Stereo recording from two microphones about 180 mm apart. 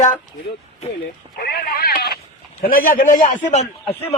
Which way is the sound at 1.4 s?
60° left (ahead or behind).